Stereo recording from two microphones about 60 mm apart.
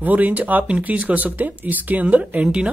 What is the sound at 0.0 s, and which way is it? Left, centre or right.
Speech, right.